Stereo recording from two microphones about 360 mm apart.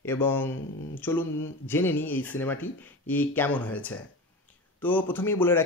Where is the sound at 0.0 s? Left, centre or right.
Centre.